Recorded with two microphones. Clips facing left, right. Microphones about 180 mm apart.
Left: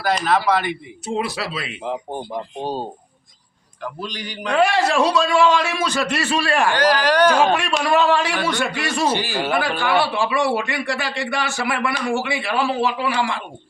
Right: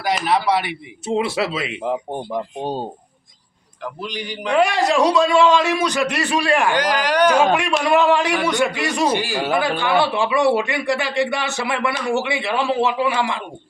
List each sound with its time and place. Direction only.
0.0 s a man's voice: 10° right (ahead or behind)
1.0 s speech: 25° right (ahead or behind)
4.0 s a man's voice: 10° right (ahead or behind)